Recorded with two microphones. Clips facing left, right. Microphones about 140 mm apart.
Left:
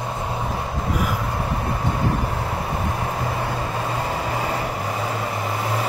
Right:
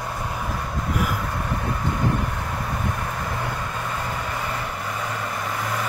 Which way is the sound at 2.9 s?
30° left (ahead or behind).